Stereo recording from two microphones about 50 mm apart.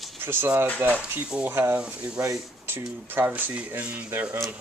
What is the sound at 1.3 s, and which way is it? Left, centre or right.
Speech, right.